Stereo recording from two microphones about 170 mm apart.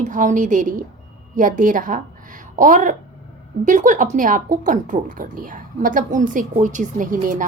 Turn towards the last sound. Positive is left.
turn(degrees=-50)  # may be behind; listen again after turning